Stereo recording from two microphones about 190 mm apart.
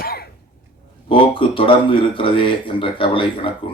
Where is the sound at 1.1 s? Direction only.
25° left (ahead or behind).